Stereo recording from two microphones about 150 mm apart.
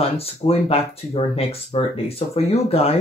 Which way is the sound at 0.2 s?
40° left (ahead or behind).